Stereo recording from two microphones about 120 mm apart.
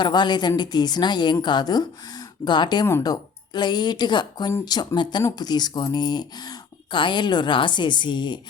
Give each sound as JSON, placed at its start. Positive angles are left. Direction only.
{"t": 0.0, "sound": "speech", "side_deg": 40}